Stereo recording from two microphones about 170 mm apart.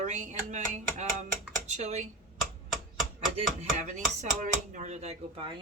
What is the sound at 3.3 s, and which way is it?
Chopping, 45° right (ahead or behind).